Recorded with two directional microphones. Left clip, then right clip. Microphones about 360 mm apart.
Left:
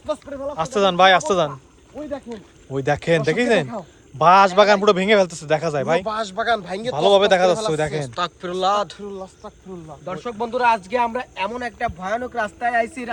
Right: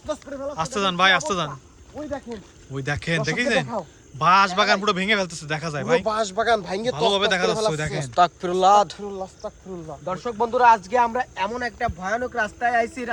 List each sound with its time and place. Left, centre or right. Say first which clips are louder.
0.1 s speech: left 3 dB; centre
6.1 s speech: even; right
6.9 s speech: left 7 dB; centre
8.0 s speech: right 6 dB; right
10.1 s speech: right 2 dB; centre